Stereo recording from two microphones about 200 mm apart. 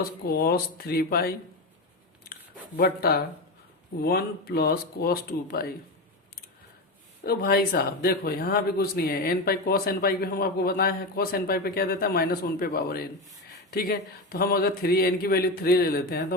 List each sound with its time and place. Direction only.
0.3 s speech: 50° left (ahead or behind)
2.7 s speech: 50° left (ahead or behind)
7.3 s speech: 50° left (ahead or behind)